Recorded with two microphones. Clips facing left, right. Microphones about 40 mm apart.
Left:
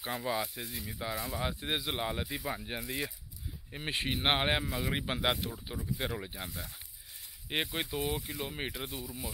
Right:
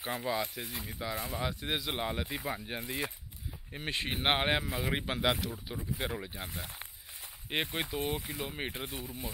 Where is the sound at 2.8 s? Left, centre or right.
Right.